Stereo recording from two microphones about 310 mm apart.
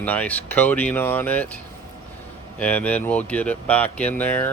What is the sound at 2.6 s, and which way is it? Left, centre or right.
Speech, centre.